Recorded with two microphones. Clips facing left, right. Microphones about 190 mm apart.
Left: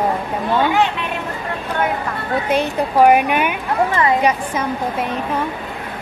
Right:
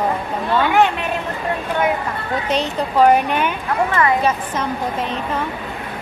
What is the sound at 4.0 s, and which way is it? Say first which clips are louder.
Speech: left 1 dB; 20° left (ahead or behind).